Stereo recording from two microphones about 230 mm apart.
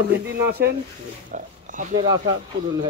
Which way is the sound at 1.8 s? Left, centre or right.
Right.